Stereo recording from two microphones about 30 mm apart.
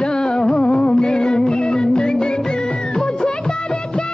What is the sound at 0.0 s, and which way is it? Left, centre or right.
Music, left.